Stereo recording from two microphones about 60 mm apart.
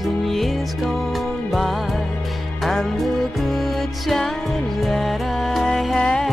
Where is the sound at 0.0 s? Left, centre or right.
Centre.